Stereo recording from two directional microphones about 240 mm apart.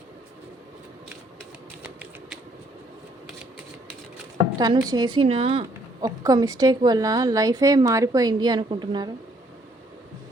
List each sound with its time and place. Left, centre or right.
1.8 s typewriter: centre
4.5 s a woman's voice: centre